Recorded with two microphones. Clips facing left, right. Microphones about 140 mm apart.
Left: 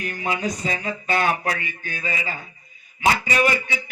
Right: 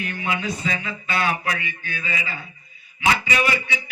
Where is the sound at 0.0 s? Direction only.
40° left (ahead or behind).